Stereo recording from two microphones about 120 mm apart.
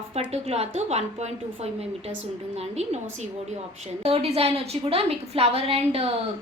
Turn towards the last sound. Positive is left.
turn(degrees=-55)  # may be behind; listen again after turning